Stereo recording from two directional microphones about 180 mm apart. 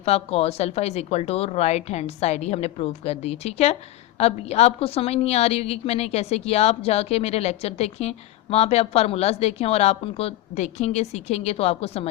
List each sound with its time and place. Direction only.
0.0 s a woman's voice: 35° left (ahead or behind)